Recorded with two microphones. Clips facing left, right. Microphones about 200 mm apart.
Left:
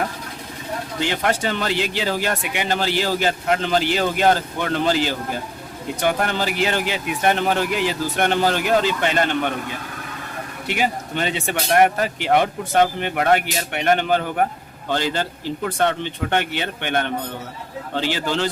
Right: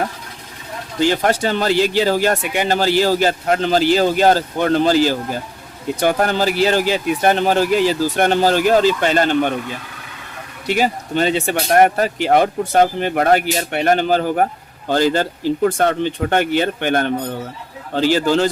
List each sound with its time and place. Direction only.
1.0 s speech: 40° right (ahead or behind)
10.7 s speech: 40° right (ahead or behind)